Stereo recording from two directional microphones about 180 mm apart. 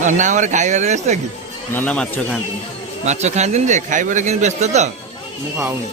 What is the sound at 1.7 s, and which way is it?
Speech, 10° left (ahead or behind).